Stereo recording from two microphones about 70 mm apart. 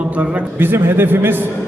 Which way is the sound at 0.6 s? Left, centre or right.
Right.